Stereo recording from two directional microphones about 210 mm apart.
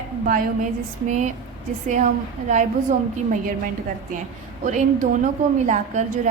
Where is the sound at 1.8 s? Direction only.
35° right (ahead or behind).